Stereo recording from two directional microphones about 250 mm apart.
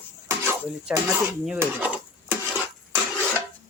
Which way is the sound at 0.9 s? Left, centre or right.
Centre.